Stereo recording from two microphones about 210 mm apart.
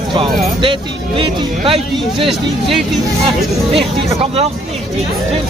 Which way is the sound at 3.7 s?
25° right (ahead or behind).